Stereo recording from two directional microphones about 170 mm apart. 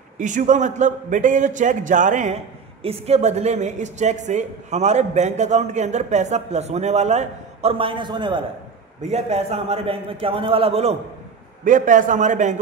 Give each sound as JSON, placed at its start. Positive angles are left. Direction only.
{"t": 0.2, "sound": "a woman's voice", "side_deg": -50}
{"t": 2.8, "sound": "a woman's voice", "side_deg": -35}
{"t": 9.0, "sound": "a man's voice", "side_deg": -40}
{"t": 11.6, "sound": "a woman's voice", "side_deg": -50}